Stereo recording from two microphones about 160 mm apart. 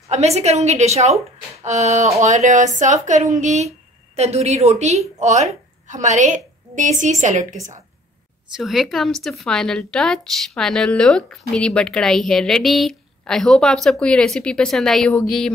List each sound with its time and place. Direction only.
0.1 s a woman's voice: 45° right (ahead or behind)
8.5 s a woman's voice: 5° right (ahead or behind)